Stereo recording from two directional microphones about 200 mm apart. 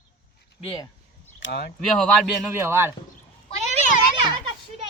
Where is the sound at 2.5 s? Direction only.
10° right (ahead or behind).